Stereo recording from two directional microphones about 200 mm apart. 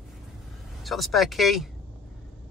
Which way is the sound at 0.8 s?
Centre (ahead or behind).